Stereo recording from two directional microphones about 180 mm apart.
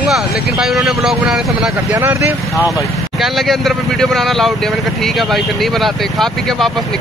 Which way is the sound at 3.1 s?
Centre (ahead or behind).